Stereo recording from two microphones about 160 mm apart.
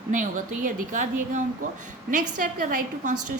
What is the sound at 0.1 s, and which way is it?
A woman's voice, 55° right (ahead or behind).